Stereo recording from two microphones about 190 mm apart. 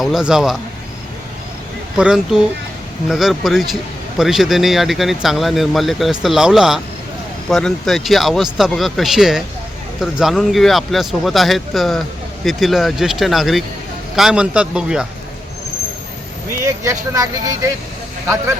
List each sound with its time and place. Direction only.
0.0 s speech: 5° right (ahead or behind)
2.0 s speech: 5° right (ahead or behind)
16.6 s speech: 15° right (ahead or behind)